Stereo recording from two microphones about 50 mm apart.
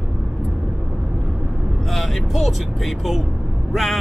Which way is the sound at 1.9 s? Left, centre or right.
Centre.